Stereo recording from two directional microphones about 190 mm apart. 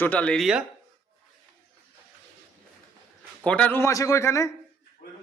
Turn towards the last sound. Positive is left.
turn(degrees=15)  # may be behind; listen again after turning